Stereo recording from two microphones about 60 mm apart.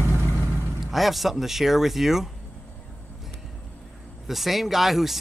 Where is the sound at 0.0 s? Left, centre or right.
Right.